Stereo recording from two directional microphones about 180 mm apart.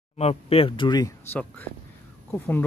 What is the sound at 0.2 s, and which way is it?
Speech, 35° left (ahead or behind).